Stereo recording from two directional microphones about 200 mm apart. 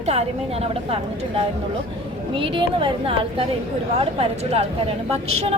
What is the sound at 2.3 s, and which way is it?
A woman's voice, 25° right (ahead or behind).